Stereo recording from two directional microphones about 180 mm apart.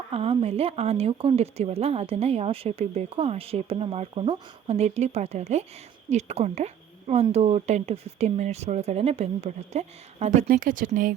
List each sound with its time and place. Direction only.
0.1 s speech: 30° right (ahead or behind); by 11.1 s 50° right (ahead or behind)